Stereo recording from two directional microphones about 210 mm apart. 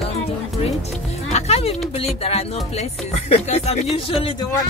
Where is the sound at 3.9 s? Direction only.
25° left (ahead or behind).